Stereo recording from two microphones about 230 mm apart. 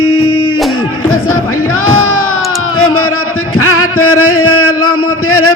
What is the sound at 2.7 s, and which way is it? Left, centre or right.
Music, left.